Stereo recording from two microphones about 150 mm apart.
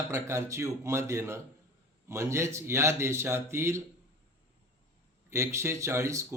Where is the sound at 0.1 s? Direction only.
20° right (ahead or behind).